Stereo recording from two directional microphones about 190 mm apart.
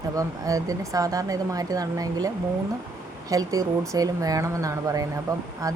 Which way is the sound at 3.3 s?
20° right (ahead or behind).